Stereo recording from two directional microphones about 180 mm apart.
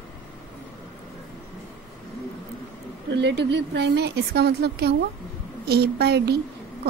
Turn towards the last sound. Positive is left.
turn(degrees=-65)  # may be behind; listen again after turning